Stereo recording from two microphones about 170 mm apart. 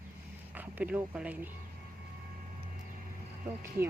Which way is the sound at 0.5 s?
10° right (ahead or behind).